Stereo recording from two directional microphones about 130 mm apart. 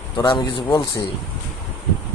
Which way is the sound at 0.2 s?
30° left (ahead or behind).